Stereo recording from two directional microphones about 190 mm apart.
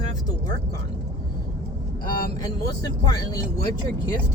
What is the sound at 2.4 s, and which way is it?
Speech, 20° left (ahead or behind).